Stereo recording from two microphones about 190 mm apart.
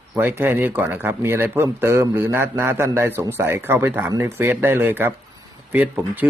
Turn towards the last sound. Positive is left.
turn(degrees=-10)  # may be behind; listen again after turning